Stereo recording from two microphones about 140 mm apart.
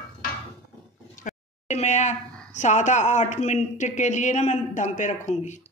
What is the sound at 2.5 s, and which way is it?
Speech, 60° left (ahead or behind).